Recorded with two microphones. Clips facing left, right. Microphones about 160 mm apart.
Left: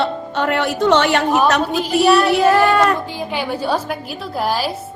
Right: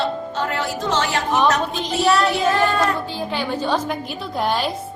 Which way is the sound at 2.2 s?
65° left (ahead or behind).